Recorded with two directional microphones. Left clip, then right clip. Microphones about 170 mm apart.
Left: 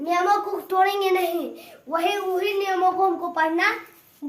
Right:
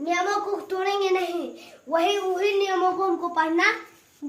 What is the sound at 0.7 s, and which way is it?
Speech, 30° left (ahead or behind).